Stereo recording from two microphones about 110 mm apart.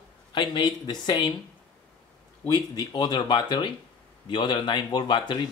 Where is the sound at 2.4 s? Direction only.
40° left (ahead or behind).